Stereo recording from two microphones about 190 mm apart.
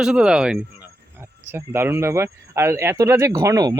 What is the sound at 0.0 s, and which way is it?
Speech, 5° right (ahead or behind).